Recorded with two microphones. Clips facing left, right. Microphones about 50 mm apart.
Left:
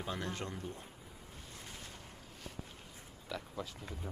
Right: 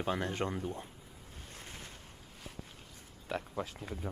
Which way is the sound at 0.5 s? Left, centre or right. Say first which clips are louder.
Right 6 dB; centre.